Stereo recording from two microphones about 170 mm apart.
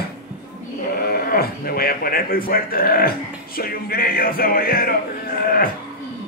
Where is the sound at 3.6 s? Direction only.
60° left (ahead or behind).